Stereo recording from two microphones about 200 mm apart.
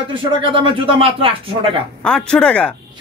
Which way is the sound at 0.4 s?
25° right (ahead or behind).